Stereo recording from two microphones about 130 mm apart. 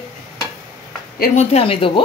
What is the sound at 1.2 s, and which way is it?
Speech, 55° left (ahead or behind).